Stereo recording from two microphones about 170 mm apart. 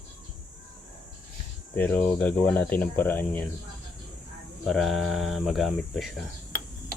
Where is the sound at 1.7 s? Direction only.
10° left (ahead or behind).